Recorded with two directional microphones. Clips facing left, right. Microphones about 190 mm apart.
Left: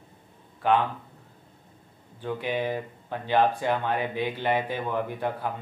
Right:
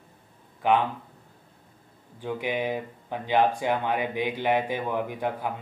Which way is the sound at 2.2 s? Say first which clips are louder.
Even; 15° right (ahead or behind).